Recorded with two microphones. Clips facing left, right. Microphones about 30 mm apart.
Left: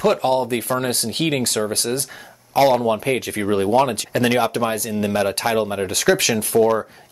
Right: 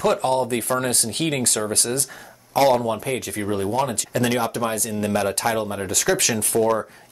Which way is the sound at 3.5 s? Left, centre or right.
Left.